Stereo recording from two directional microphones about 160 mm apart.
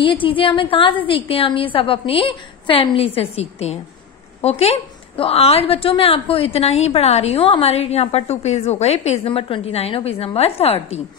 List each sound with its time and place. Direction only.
0.0 s a woman's voice: 30° left (ahead or behind)